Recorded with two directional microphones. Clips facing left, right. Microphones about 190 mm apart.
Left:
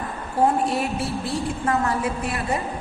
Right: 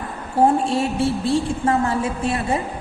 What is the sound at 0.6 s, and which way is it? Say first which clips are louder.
A woman's voice: right 4 dB; 25° right (ahead or behind).